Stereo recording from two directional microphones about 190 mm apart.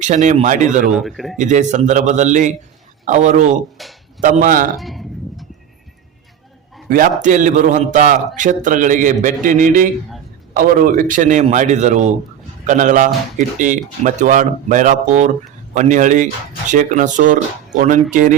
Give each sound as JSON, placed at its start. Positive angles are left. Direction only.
{"t": 0.0, "sound": "speech", "side_deg": -40}
{"t": 0.9, "sound": "a man's voice", "side_deg": 0}
{"t": 1.4, "sound": "speech", "side_deg": -40}
{"t": 3.8, "sound": "a man's voice", "side_deg": 0}
{"t": 4.2, "sound": "speech", "side_deg": -45}
{"t": 4.8, "sound": "a sound", "side_deg": 0}
{"t": 7.2, "sound": "speech", "side_deg": -40}